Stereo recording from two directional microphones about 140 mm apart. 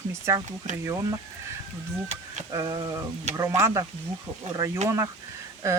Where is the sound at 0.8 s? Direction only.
20° right (ahead or behind).